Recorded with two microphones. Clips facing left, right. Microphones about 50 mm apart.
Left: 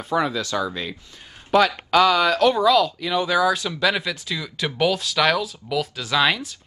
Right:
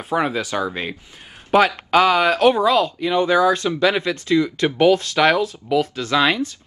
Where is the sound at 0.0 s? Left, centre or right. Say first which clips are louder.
Right 2 dB; right.